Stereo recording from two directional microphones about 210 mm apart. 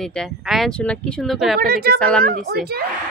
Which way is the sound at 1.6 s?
45° right (ahead or behind).